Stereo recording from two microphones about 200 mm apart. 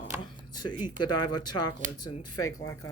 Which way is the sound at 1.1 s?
20° left (ahead or behind).